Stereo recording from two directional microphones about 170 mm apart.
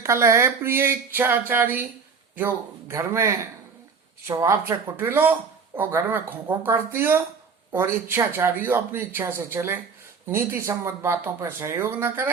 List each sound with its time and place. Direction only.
0.0 s speech: 15° right (ahead or behind)